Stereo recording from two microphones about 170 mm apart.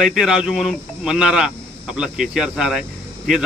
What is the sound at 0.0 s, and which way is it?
Speech, 5° right (ahead or behind).